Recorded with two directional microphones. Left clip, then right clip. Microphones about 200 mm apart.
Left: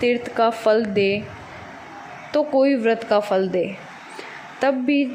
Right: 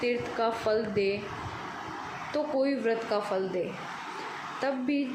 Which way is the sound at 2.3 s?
35° left (ahead or behind).